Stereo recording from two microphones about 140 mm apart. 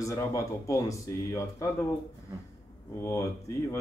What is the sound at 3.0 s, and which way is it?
Speech, 20° left (ahead or behind).